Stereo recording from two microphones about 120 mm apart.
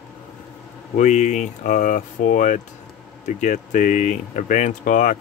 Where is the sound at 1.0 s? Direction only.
85° left.